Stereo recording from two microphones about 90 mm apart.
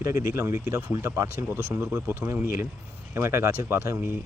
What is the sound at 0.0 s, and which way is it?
Speech, 30° right (ahead or behind).